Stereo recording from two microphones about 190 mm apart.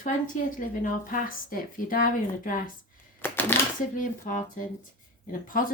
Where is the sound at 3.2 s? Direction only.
10° left (ahead or behind).